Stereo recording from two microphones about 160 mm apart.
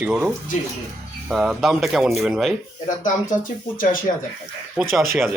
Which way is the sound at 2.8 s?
55° left (ahead or behind).